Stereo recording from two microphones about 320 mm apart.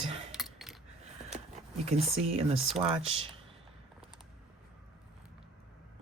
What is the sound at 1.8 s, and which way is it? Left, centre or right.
Speech, centre.